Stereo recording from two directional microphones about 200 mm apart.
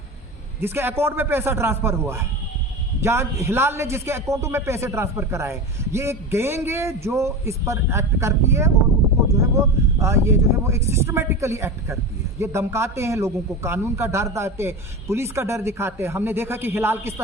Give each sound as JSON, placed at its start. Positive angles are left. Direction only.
{"t": 0.6, "sound": "a man's voice", "side_deg": -10}